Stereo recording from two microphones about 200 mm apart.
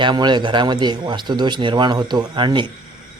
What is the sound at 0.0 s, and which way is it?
A man's voice, 20° right (ahead or behind).